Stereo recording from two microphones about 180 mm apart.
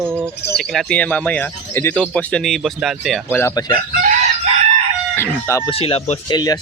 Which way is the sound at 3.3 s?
15° left (ahead or behind).